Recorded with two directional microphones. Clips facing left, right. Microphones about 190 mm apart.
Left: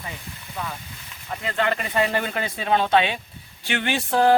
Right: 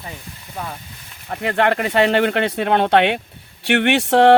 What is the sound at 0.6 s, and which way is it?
Speech, 45° right (ahead or behind).